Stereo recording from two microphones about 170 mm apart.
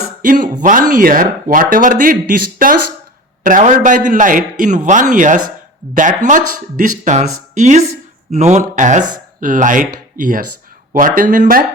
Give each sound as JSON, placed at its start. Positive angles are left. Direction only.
{"t": 0.2, "sound": "speech", "side_deg": -50}